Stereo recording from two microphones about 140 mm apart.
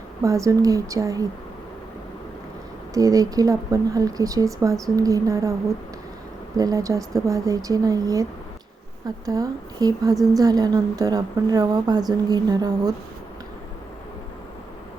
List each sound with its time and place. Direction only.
0.2 s speech: 20° right (ahead or behind)
2.9 s speech: 25° right (ahead or behind)